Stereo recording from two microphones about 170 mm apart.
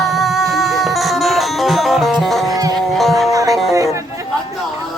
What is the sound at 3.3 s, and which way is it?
Music, 20° right (ahead or behind).